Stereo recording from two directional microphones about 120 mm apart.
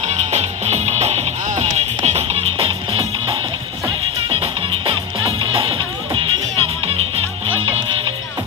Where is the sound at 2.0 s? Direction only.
60° right (ahead or behind).